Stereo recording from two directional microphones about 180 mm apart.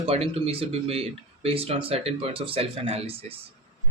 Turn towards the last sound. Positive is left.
turn(degrees=-35)  # may be behind; listen again after turning